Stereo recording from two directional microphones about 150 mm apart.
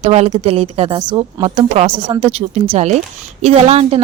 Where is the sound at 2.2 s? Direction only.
45° right (ahead or behind).